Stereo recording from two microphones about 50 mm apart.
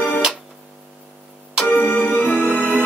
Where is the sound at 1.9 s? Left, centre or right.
Left.